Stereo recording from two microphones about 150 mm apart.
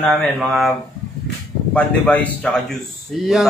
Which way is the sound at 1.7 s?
10° left (ahead or behind).